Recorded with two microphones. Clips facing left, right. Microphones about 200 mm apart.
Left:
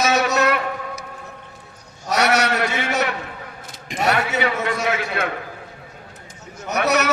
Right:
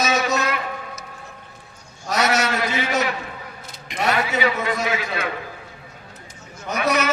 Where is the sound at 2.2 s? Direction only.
65° left (ahead or behind).